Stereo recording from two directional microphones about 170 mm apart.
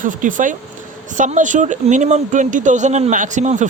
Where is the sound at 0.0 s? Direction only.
50° right (ahead or behind).